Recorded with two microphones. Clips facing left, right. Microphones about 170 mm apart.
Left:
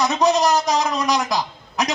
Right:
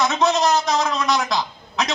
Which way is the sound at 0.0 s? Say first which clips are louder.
Left 1 dB; 15° left (ahead or behind).